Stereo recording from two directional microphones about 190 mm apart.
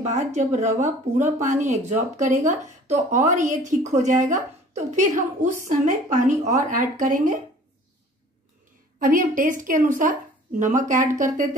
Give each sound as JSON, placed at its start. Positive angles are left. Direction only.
{"t": 0.0, "sound": "a woman's voice", "side_deg": -40}
{"t": 9.0, "sound": "a woman's voice", "side_deg": -45}